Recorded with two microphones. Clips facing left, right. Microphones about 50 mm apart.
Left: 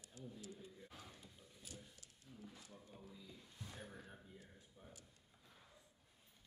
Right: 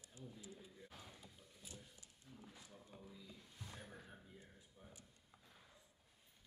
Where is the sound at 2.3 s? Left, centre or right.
Centre.